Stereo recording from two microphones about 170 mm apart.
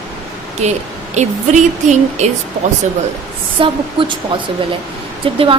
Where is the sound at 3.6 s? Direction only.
30° right (ahead or behind).